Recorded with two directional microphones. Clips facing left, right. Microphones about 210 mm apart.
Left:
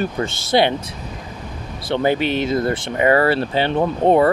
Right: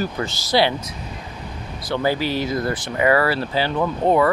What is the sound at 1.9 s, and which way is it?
Speech, 20° left (ahead or behind).